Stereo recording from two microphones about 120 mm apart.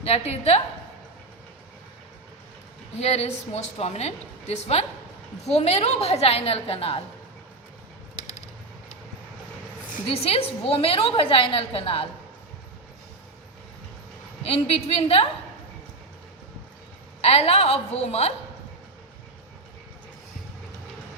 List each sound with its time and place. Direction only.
0.0 s a woman's voice: 60° left (ahead or behind)
3.0 s a woman's voice: 60° left (ahead or behind)
10.1 s a woman's voice: 55° left (ahead or behind)
14.4 s a woman's voice: 55° left (ahead or behind)
17.2 s a woman's voice: 55° left (ahead or behind)